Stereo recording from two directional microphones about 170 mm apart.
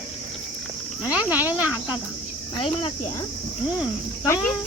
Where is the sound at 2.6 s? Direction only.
35° left (ahead or behind).